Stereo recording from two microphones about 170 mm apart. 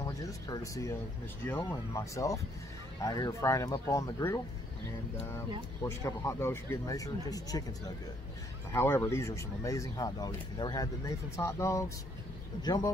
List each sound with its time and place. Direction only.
0.0 s speech: 20° left (ahead or behind)
5.9 s speech: 15° left (ahead or behind)
8.7 s speech: 15° left (ahead or behind)